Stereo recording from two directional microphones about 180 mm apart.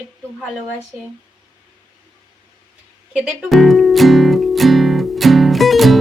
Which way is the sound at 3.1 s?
5° right (ahead or behind).